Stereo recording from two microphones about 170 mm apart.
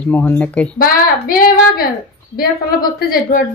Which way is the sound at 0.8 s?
55° left (ahead or behind).